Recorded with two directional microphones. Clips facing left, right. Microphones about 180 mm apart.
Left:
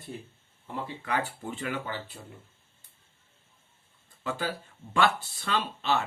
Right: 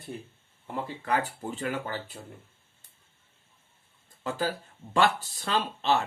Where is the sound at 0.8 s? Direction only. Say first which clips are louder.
Right 2 dB; 45° right (ahead or behind).